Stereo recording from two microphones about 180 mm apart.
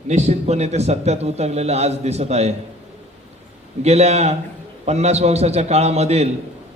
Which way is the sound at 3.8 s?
35° right (ahead or behind).